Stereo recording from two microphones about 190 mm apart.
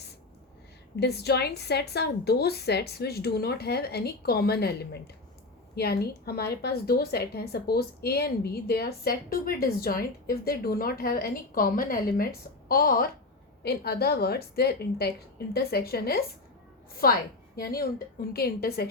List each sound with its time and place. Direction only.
0.9 s a woman's voice: 60° left (ahead or behind)
5.7 s a woman's voice: 55° left (ahead or behind)